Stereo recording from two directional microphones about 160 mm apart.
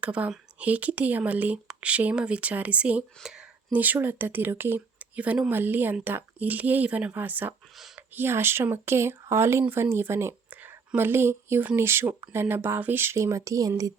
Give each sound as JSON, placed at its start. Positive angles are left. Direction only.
{"t": 0.0, "sound": "speech", "side_deg": -10}
{"t": 7.8, "sound": "a sound", "side_deg": 0}
{"t": 8.1, "sound": "speech", "side_deg": -15}